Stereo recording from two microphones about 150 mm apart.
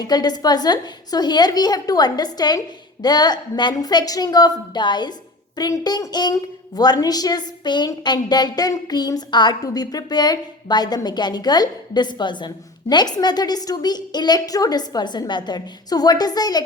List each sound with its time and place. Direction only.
0.0 s a woman's voice: 25° left (ahead or behind)